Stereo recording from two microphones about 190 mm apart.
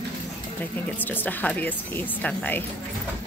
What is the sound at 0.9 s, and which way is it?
Speech, 10° left (ahead or behind).